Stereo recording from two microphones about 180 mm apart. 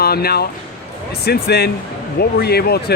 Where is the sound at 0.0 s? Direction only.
60° left (ahead or behind).